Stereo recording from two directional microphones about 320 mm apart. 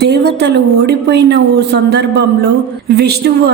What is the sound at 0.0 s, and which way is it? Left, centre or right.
A woman's voice, right.